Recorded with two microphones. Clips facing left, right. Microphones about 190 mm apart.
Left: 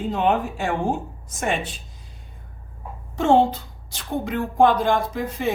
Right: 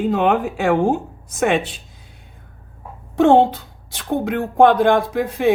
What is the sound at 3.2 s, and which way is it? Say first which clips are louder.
Speech: right 5 dB; 60° right (ahead or behind).